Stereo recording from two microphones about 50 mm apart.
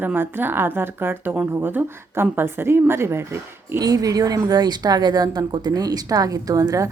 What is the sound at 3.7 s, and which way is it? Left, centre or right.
Speech, right.